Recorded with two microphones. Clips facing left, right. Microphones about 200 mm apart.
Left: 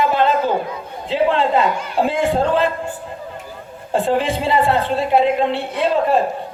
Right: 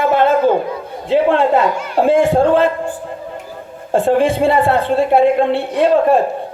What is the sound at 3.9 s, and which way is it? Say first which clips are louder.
A woman's voice: right 5 dB; 50° right (ahead or behind).